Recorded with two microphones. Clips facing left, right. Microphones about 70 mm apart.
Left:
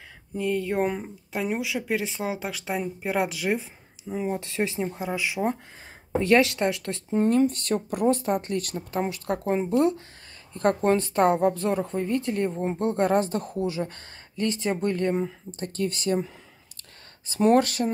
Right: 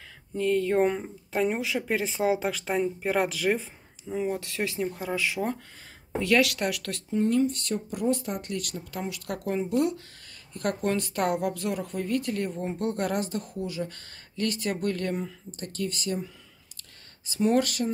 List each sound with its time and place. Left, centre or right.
0.4 s speech: centre
4.1 s a woman's voice: centre
6.1 s a woman's voice: left
7.2 s a woman's voice: left
17.3 s speech: left